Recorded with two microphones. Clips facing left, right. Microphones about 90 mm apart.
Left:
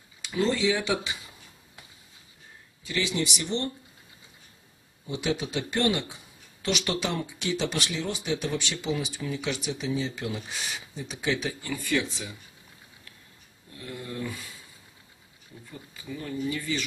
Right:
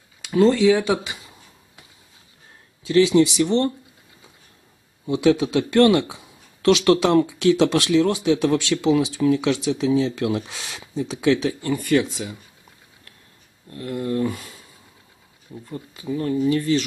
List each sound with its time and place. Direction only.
0.4 s speech: 55° right (ahead or behind)
2.8 s speech: 90° right
5.0 s speech: 90° right
7.1 s speech: 80° right
11.7 s speech: 45° right (ahead or behind)
13.7 s speech: 60° right (ahead or behind)
15.7 s speech: 70° right (ahead or behind)